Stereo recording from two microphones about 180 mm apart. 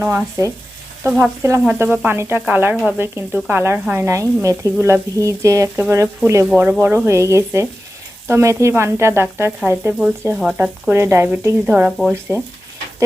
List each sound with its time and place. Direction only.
0.0 s speech: 15° right (ahead or behind)